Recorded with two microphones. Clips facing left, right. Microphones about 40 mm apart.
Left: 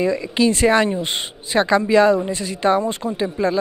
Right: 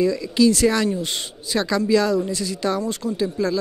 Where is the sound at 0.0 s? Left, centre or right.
Left.